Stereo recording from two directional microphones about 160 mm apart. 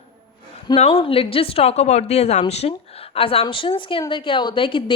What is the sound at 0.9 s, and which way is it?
A woman's voice, 35° left (ahead or behind).